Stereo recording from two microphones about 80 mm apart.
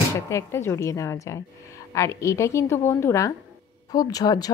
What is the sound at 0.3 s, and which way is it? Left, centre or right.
Speech, left.